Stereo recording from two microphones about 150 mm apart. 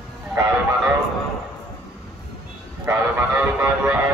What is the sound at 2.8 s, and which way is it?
Vehicle, 15° right (ahead or behind).